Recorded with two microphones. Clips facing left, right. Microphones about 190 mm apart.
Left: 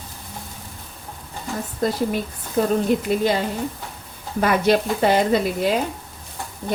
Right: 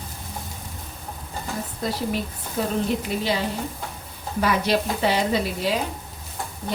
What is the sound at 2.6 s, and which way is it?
Frying, 45° left (ahead or behind).